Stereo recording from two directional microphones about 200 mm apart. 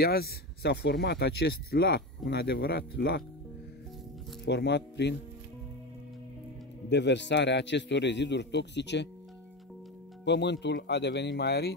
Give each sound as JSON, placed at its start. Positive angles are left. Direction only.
{"t": 0.0, "sound": "speech", "side_deg": 50}
{"t": 4.5, "sound": "speech", "side_deg": 60}
{"t": 6.9, "sound": "speech", "side_deg": 60}
{"t": 10.2, "sound": "speech", "side_deg": 60}